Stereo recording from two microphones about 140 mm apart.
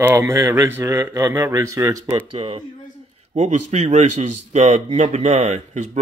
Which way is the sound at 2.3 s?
40° right (ahead or behind).